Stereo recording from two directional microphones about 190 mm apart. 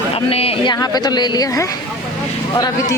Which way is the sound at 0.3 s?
30° left (ahead or behind).